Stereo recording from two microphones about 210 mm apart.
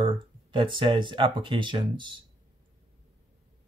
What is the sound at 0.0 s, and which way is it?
Speech, 25° right (ahead or behind).